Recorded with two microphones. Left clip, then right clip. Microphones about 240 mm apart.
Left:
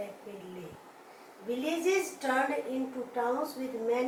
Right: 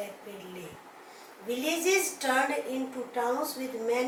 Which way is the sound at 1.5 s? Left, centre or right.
Centre.